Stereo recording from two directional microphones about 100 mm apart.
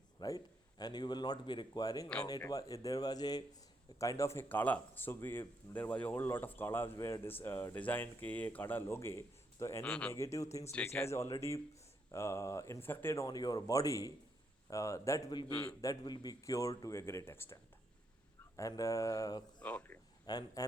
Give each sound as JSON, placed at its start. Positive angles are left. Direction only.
{"t": 0.2, "sound": "a man's voice", "side_deg": 40}
{"t": 9.8, "sound": "speech", "side_deg": 10}
{"t": 10.1, "sound": "speech", "side_deg": 30}
{"t": 13.2, "sound": "speech", "side_deg": 40}
{"t": 18.5, "sound": "speech", "side_deg": 35}
{"t": 19.6, "sound": "speech", "side_deg": 15}
{"t": 20.2, "sound": "speech", "side_deg": 40}